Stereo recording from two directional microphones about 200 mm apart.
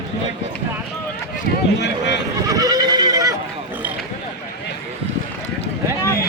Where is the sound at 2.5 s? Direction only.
20° right (ahead or behind).